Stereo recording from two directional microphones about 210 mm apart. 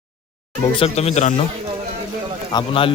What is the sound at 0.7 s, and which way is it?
Speech, 30° left (ahead or behind).